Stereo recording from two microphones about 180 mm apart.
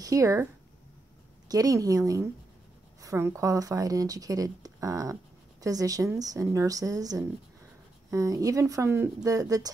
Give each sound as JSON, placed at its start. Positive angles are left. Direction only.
{"t": 0.0, "sound": "speech", "side_deg": -15}
{"t": 1.5, "sound": "speech", "side_deg": -20}